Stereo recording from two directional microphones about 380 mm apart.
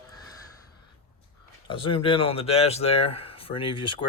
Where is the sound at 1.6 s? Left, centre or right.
Centre.